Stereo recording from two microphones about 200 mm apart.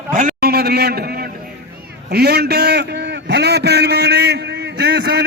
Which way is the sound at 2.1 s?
55° right (ahead or behind).